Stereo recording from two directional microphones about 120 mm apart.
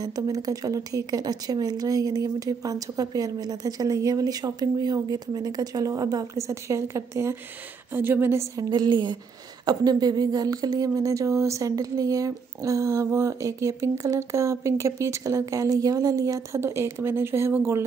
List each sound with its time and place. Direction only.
0.0 s speech: 30° right (ahead or behind)
8.6 s speech: 35° right (ahead or behind); by 17.8 s 20° right (ahead or behind)